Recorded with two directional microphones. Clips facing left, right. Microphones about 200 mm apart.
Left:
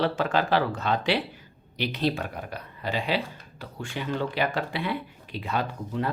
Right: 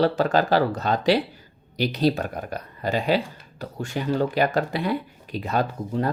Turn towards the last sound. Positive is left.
turn(degrees=-40)  # may be behind; listen again after turning